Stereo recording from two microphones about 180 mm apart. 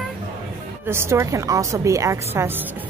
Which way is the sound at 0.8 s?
15° right (ahead or behind).